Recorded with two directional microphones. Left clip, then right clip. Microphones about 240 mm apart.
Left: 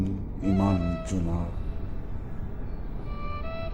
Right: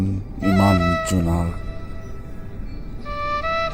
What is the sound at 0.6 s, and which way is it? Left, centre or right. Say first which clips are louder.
Speech: right 11 dB; right.